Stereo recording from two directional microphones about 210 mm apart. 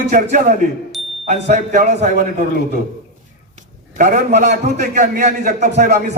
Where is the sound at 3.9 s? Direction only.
40° right (ahead or behind).